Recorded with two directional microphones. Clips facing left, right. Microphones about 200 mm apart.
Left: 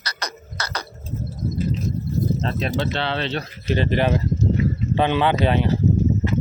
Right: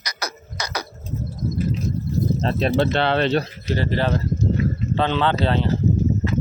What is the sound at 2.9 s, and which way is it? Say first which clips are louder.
Speech: right 6 dB; 55° right (ahead or behind).